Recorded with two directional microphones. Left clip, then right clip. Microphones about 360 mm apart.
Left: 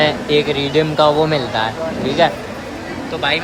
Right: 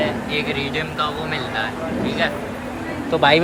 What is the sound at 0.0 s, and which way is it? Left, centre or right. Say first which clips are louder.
Speech: left 7 dB; centre.